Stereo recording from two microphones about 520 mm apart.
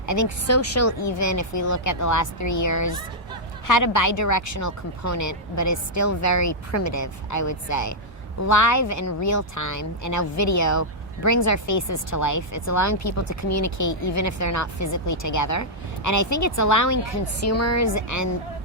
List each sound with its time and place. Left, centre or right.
0.0 s speech: left
0.9 s speech: left